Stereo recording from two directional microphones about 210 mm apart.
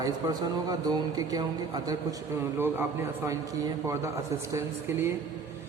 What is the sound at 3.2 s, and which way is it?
A man's voice, 15° right (ahead or behind).